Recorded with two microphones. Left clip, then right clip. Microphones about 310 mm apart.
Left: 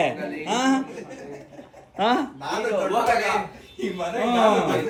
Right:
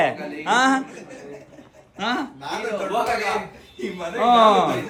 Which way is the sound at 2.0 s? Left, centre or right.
Centre.